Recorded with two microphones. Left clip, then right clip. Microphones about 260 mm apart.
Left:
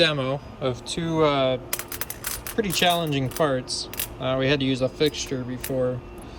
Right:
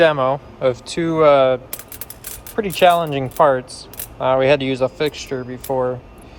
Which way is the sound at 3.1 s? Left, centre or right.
Centre.